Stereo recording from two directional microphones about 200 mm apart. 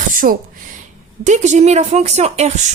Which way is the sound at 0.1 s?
45° right (ahead or behind).